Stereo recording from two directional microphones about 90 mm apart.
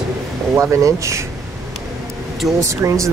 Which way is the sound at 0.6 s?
35° right (ahead or behind).